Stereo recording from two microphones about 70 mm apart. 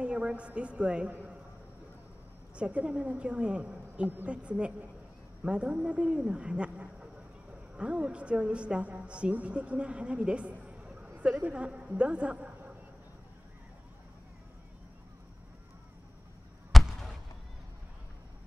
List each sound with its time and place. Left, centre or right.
0.0 s a woman's voice: centre
2.5 s a woman's voice: centre
16.7 s a sound: centre